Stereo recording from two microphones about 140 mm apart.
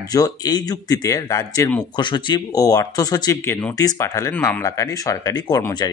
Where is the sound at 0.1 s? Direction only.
30° left (ahead or behind).